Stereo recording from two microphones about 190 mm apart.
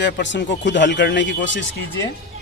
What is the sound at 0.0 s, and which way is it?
Speech, 70° left (ahead or behind).